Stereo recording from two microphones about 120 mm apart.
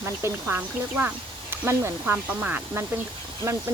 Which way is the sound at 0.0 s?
20° right (ahead or behind).